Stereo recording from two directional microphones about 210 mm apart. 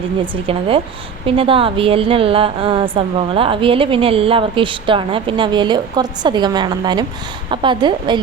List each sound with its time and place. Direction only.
0.2 s a woman's voice: 25° right (ahead or behind)